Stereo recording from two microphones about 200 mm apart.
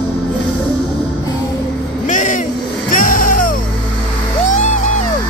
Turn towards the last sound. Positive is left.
turn(degrees=40)  # may be behind; listen again after turning